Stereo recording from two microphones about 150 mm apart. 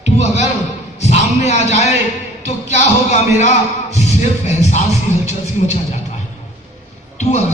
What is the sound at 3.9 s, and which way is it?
Music, 50° left (ahead or behind).